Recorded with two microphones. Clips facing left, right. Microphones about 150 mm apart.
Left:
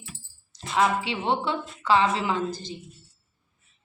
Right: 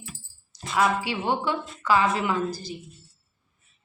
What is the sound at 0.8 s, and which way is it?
A woman's voice, 25° left (ahead or behind).